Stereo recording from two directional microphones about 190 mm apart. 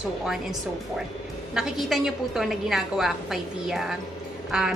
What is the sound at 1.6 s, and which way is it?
A woman's voice, centre (ahead or behind).